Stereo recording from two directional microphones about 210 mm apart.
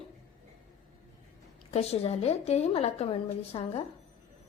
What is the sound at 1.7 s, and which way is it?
A woman's voice, 30° left (ahead or behind).